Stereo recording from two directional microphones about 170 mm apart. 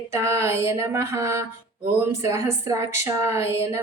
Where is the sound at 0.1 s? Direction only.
15° right (ahead or behind).